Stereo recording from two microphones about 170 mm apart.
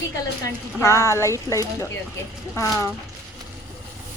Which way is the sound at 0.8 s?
20° left (ahead or behind).